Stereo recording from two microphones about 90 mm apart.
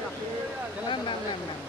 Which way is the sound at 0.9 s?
65° left (ahead or behind).